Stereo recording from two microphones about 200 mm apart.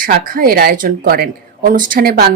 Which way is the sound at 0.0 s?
45° right (ahead or behind).